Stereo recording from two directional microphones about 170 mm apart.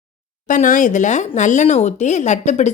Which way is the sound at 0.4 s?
50° left (ahead or behind).